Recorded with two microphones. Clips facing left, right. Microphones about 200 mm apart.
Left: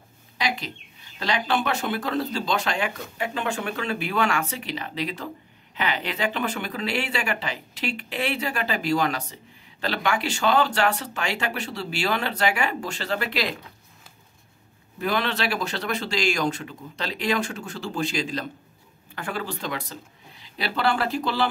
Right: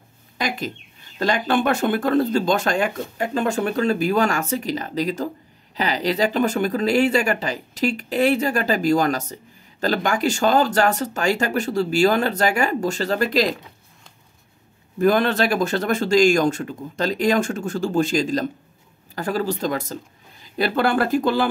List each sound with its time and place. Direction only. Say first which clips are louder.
0.4 s speech: right 3 dB; 50° right (ahead or behind)
15.0 s speech: right 8 dB; 45° right (ahead or behind)